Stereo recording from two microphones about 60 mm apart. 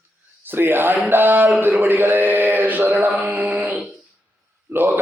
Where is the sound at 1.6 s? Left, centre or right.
Right.